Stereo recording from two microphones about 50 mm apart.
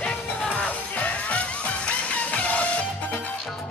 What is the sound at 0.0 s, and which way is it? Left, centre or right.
Music, left.